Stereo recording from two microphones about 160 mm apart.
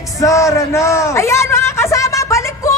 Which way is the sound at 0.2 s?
20° left (ahead or behind).